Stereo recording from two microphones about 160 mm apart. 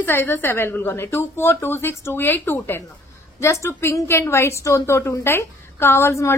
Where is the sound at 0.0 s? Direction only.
15° left (ahead or behind).